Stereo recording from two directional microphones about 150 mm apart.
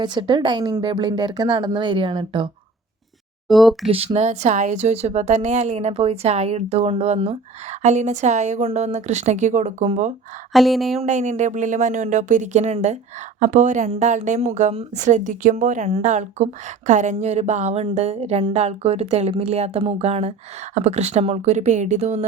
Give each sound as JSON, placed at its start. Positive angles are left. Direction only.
{"t": 0.0, "sound": "speech", "side_deg": -30}
{"t": 3.5, "sound": "speech", "side_deg": 0}
{"t": 3.8, "sound": "a woman's voice", "side_deg": -40}
{"t": 10.5, "sound": "speech", "side_deg": 0}
{"t": 11.0, "sound": "a woman's voice", "side_deg": -50}